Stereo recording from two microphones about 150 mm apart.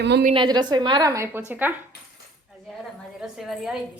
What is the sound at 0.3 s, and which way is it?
A woman's voice, 30° right (ahead or behind).